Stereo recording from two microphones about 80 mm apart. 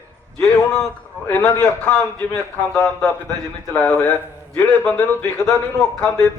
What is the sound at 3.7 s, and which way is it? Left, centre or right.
A man's voice, left.